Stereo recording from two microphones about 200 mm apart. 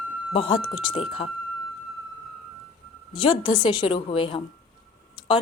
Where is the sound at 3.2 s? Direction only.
25° left (ahead or behind).